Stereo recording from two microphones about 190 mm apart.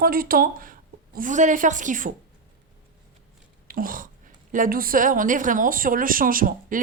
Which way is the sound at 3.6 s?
50° right (ahead or behind).